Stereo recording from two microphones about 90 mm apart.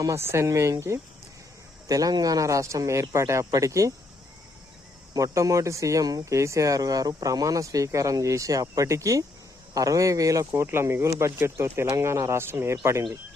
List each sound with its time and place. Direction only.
0.0 s speech: 30° right (ahead or behind)
5.1 s speech: 35° right (ahead or behind)
10.5 s speech: 30° right (ahead or behind)